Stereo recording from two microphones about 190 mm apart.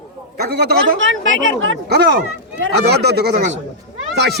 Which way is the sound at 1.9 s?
55° right (ahead or behind).